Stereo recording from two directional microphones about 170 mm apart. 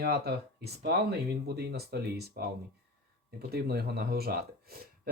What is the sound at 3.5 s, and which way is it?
Speech, 70° right (ahead or behind).